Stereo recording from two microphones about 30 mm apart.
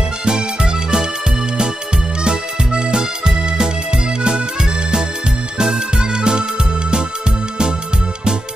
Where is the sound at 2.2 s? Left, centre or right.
Right.